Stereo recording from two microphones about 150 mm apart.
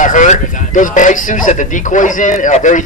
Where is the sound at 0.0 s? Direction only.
60° left (ahead or behind).